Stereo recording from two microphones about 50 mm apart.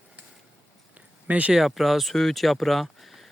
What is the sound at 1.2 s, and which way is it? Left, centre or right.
Speech, right.